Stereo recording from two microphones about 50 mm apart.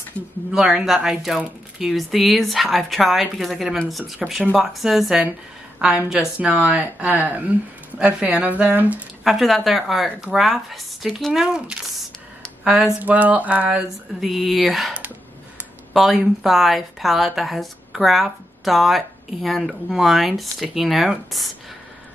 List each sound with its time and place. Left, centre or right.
0.5 s a woman's voice: centre
0.8 s a woman's voice: centre
5.8 s a woman's voice: centre
7.2 s a sound: right
8.0 s a woman's voice: right
8.5 s a sound: right
9.2 s a woman's voice: centre
11.3 s speech: centre
13.0 s a sound: right
14.2 s a woman's voice: centre